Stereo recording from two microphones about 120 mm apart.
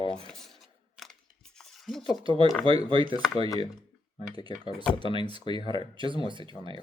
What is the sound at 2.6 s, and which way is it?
Speech, 50° right (ahead or behind).